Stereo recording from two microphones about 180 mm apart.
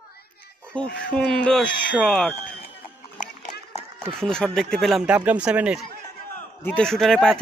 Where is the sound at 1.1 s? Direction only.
5° left (ahead or behind).